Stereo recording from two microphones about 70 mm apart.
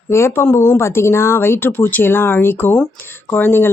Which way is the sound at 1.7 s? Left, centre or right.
Left.